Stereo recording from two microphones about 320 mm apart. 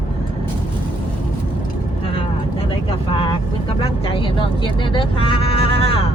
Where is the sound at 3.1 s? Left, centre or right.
Centre.